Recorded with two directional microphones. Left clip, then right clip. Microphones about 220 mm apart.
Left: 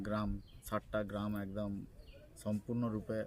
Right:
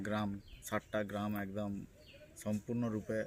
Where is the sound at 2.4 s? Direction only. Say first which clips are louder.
Even; 10° left (ahead or behind).